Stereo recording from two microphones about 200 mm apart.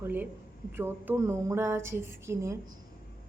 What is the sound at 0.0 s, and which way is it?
A woman's voice, 10° right (ahead or behind).